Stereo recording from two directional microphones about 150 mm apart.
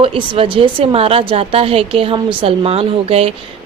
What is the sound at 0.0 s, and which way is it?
Speech, 35° right (ahead or behind).